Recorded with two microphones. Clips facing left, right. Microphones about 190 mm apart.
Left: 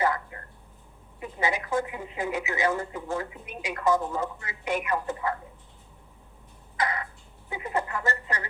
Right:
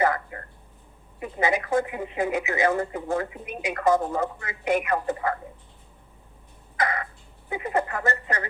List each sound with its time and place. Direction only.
0.0 s a sound: 60° right (ahead or behind)
1.2 s speech: 55° right (ahead or behind)
7.5 s speech: 60° right (ahead or behind)